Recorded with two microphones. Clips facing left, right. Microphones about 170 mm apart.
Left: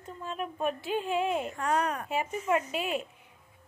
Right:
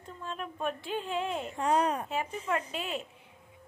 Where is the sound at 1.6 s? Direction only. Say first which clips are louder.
Right 2 dB; 25° right (ahead or behind).